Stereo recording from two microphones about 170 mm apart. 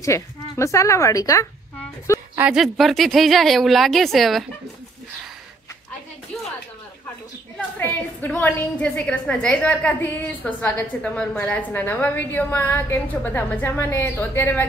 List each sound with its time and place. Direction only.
0.0 s a woman's voice: 15° left (ahead or behind)
2.3 s speech: 5° right (ahead or behind)
7.5 s a woman's voice: 10° left (ahead or behind)